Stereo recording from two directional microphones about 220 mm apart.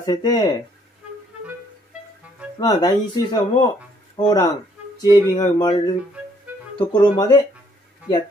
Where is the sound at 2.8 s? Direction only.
20° left (ahead or behind).